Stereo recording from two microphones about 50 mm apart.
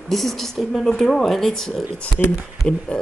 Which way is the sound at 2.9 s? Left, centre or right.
Centre.